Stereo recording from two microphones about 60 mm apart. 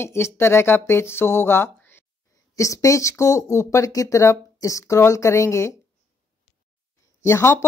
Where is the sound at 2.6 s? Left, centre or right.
Left.